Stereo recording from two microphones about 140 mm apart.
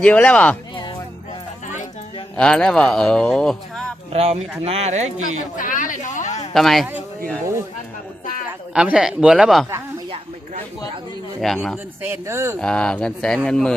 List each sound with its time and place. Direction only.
0.0 s speech: 10° left (ahead or behind)
2.3 s speech: 5° left (ahead or behind)
4.1 s speech: 50° right (ahead or behind)
5.5 s a woman's voice: 75° left (ahead or behind)
6.5 s speech: centre (ahead or behind)
8.7 s speech: 5° right (ahead or behind)
11.3 s speech: centre (ahead or behind)
12.0 s speech: 20° right (ahead or behind)
12.5 s speech: 5° left (ahead or behind)